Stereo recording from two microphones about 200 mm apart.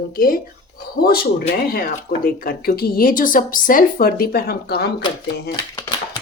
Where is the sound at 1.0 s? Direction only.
50° left (ahead or behind).